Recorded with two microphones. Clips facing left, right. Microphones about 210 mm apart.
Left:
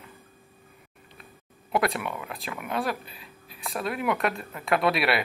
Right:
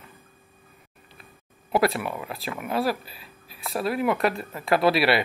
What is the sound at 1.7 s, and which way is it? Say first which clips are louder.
Speech: right 3 dB; centre (ahead or behind).